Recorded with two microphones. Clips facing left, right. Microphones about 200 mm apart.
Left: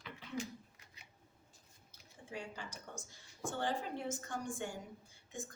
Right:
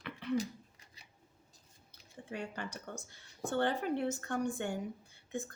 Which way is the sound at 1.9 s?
60° right (ahead or behind).